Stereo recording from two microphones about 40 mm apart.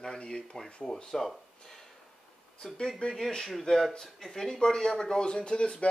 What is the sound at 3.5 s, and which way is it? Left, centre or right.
Speech, centre.